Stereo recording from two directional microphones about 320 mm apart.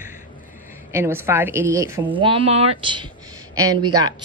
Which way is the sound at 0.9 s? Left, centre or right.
Centre.